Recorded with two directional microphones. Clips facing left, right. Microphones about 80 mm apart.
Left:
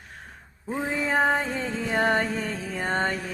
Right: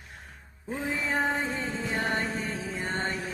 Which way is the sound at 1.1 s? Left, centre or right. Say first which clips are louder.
Left 6 dB; left.